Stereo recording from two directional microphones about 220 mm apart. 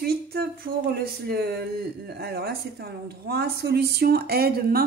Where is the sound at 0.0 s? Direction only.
45° right (ahead or behind).